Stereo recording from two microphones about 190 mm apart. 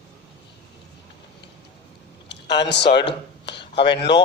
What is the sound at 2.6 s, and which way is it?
Speech, 65° left (ahead or behind).